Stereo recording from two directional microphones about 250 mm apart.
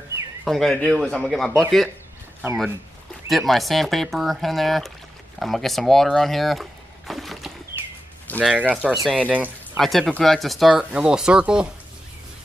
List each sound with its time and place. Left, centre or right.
0.5 s speech: centre